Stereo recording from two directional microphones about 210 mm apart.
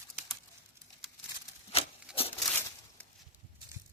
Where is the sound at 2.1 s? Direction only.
5° right (ahead or behind).